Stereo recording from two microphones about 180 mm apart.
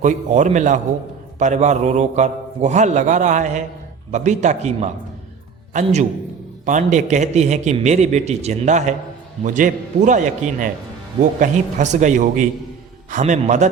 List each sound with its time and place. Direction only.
0.0 s a man's voice: 45° right (ahead or behind)